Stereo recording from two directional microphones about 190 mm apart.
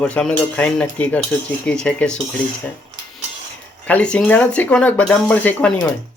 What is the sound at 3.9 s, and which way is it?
Speech, 5° left (ahead or behind).